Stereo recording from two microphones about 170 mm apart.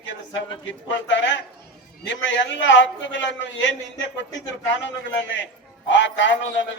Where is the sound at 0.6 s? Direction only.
90° left.